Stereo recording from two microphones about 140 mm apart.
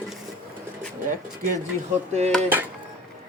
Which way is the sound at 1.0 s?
65° right (ahead or behind).